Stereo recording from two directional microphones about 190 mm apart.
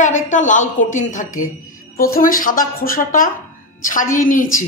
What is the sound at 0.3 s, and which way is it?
Speech, 40° left (ahead or behind).